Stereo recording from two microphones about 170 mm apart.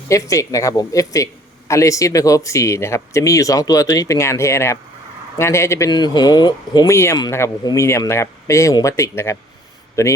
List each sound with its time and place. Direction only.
0.1 s speech: 20° left (ahead or behind)